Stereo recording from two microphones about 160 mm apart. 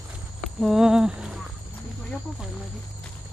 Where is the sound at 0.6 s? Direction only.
5° right (ahead or behind).